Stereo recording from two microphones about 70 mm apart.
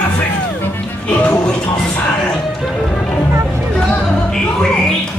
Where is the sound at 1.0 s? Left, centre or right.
Left.